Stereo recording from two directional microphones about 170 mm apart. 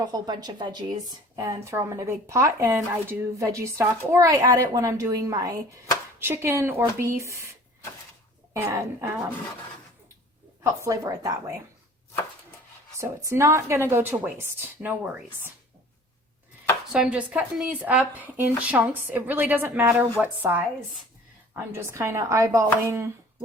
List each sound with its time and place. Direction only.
0.0 s a woman's voice: 25° right (ahead or behind)
8.5 s speech: 15° right (ahead or behind)
10.6 s a woman's voice: 15° right (ahead or behind)
13.0 s speech: 15° right (ahead or behind)
16.9 s speech: 5° right (ahead or behind)